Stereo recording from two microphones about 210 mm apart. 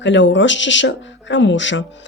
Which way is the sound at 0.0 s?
60° left (ahead or behind).